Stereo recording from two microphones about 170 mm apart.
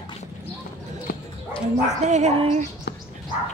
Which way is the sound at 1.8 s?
45° right (ahead or behind).